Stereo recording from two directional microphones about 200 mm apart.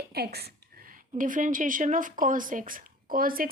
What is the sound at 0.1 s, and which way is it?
A woman's voice, 50° right (ahead or behind).